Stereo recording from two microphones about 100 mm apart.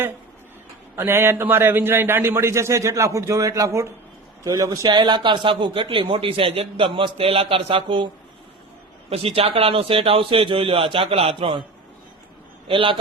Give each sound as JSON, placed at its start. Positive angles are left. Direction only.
{"t": 0.9, "sound": "a man's voice", "side_deg": -25}
{"t": 9.0, "sound": "a man's voice", "side_deg": -75}
{"t": 12.6, "sound": "a man's voice", "side_deg": -60}